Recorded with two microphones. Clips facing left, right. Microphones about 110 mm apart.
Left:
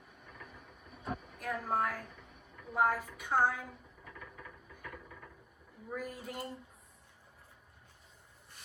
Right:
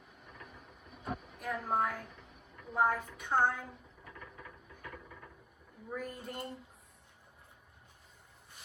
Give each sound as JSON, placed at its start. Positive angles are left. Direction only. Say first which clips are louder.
{"t": 0.3, "sound": "ratchet", "louder": "even", "side_deg": -5}
{"t": 1.1, "sound": "a sound", "louder": "even", "side_deg": -15}
{"t": 1.4, "sound": "speech", "louder": "right 1 dB", "side_deg": 0}
{"t": 2.0, "sound": "speech", "louder": "even", "side_deg": -10}
{"t": 2.6, "sound": "a woman's voice", "louder": "even", "side_deg": 5}
{"t": 4.0, "sound": "a sound", "louder": "even", "side_deg": -5}
{"t": 5.9, "sound": "speech", "louder": "even", "side_deg": 5}